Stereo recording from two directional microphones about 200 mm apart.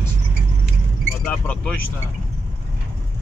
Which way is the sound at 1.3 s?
5° left (ahead or behind).